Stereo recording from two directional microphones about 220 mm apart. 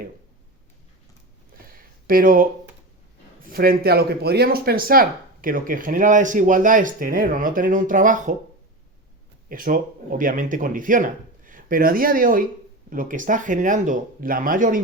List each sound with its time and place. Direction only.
1.5 s a sound: 40° right (ahead or behind)
3.4 s a man's voice: 40° right (ahead or behind)
9.5 s a man's voice: 40° right (ahead or behind)